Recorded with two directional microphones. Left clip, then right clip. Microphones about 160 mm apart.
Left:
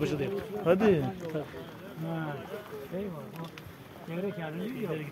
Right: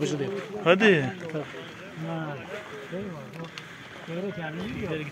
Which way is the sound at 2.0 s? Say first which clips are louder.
Right 2 dB; 35° right (ahead or behind).